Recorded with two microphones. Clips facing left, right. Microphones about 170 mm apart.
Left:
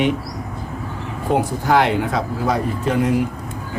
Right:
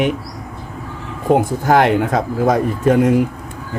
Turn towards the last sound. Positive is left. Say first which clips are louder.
# right 6 dB
turn(degrees=-45)  # may be behind; listen again after turning